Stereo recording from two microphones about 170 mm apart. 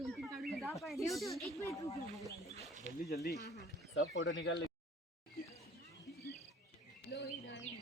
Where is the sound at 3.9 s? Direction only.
90° left.